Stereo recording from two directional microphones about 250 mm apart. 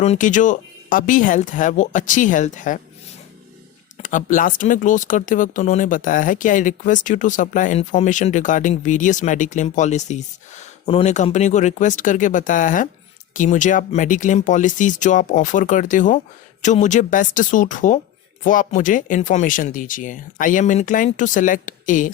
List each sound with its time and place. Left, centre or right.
0.0 s speech: left
3.9 s speech: left